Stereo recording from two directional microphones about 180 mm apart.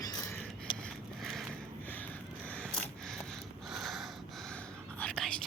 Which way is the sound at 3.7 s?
Centre (ahead or behind).